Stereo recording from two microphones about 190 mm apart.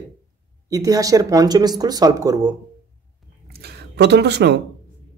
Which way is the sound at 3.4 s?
55° right (ahead or behind).